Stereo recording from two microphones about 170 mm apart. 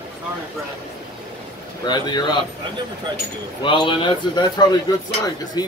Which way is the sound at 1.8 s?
25° left (ahead or behind).